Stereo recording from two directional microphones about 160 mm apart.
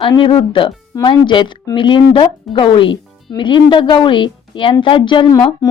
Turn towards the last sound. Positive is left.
turn(degrees=25)  # may be behind; listen again after turning